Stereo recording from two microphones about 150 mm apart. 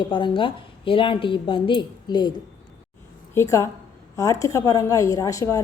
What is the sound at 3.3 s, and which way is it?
Speech, 20° left (ahead or behind).